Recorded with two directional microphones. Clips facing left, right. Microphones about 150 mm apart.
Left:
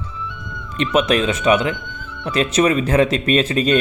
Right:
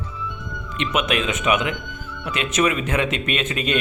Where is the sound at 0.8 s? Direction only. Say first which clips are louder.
Left 6 dB; 35° left (ahead or behind).